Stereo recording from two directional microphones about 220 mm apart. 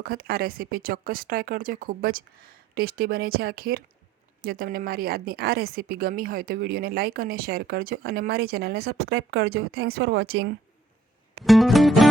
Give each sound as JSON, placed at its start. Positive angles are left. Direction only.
{"t": 0.0, "sound": "a woman's voice", "side_deg": -45}
{"t": 11.4, "sound": "music", "side_deg": 0}